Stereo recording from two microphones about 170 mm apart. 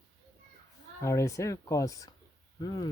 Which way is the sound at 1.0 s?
20° left (ahead or behind).